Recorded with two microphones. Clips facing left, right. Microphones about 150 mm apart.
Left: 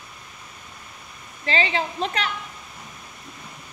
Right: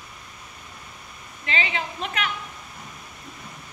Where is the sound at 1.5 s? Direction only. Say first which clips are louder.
Left 4 dB; 35° left (ahead or behind).